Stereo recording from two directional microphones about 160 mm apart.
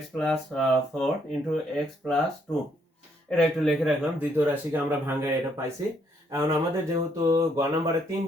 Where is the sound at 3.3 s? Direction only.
5° left (ahead or behind); by 5.6 s 15° right (ahead or behind).